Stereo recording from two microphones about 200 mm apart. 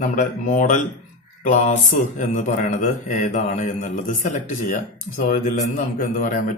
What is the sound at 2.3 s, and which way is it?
A man's voice, 40° left (ahead or behind).